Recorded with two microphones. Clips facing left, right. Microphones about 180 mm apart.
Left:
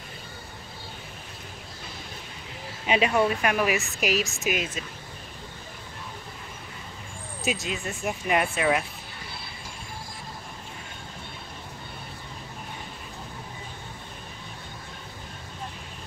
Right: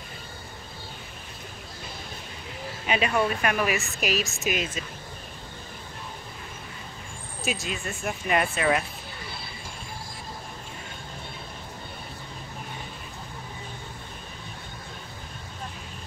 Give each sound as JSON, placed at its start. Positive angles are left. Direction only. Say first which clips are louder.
{"t": 2.9, "sound": "speech", "louder": "left 2 dB", "side_deg": 20}
{"t": 7.4, "sound": "speech", "louder": "left 1 dB", "side_deg": 20}